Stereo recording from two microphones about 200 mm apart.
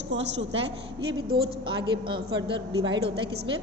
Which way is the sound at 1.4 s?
25° right (ahead or behind).